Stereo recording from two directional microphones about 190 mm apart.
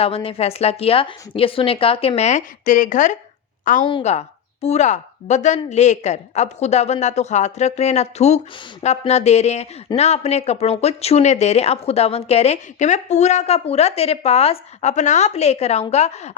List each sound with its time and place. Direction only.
0.0 s a woman's voice: 30° left (ahead or behind)
3.8 s a woman's voice: 30° left (ahead or behind)